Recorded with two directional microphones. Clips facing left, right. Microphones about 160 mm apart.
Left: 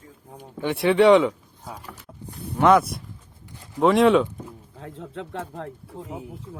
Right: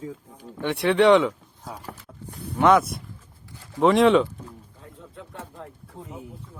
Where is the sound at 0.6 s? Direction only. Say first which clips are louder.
Left 2 dB; centre (ahead or behind).